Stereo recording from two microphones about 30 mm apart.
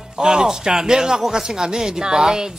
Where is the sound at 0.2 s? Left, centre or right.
Right.